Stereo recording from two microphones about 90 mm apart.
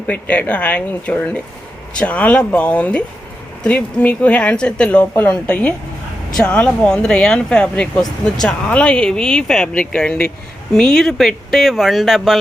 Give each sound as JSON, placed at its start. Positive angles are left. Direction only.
{"t": 0.1, "sound": "speech", "side_deg": 15}